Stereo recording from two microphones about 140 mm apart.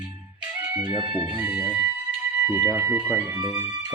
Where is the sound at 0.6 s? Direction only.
15° right (ahead or behind).